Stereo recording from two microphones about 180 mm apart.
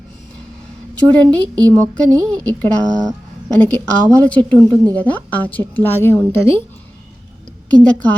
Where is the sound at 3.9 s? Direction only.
5° left (ahead or behind).